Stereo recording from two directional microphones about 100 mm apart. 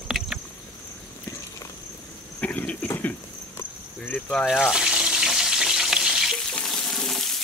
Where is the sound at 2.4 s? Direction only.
15° left (ahead or behind).